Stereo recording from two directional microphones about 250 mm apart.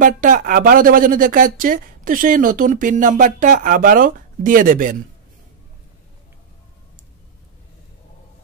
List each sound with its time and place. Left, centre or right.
0.0 s speech: right